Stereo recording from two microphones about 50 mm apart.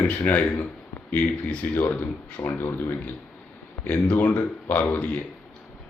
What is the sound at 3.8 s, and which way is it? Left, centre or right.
Speech, left.